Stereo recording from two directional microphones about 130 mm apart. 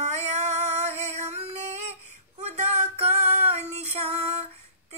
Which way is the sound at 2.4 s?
60° right (ahead or behind).